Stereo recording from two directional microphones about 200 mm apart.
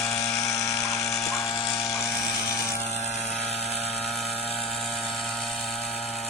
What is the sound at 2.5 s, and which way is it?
Vehicle, 15° left (ahead or behind).